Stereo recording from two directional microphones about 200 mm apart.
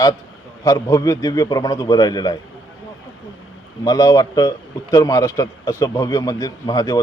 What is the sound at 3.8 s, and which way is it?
A man's voice, 20° left (ahead or behind).